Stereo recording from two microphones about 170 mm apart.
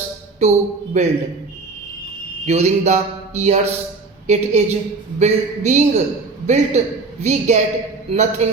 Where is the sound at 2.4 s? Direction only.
40° right (ahead or behind).